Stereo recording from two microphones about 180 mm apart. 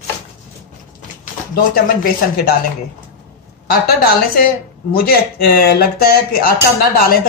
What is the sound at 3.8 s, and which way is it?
Speech, 55° left (ahead or behind).